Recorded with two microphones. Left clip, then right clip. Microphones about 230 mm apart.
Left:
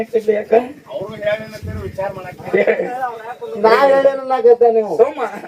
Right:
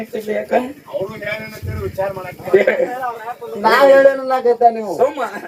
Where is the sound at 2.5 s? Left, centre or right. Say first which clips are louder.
Right 1 dB; right.